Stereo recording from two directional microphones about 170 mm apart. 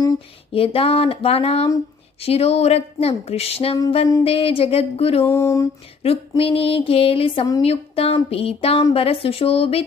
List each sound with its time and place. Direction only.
0.5 s speech: 35° left (ahead or behind)
5.2 s a sound: 15° left (ahead or behind)
6.0 s speech: 35° left (ahead or behind)